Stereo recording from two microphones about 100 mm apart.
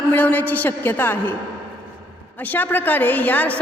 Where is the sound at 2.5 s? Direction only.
20° left (ahead or behind).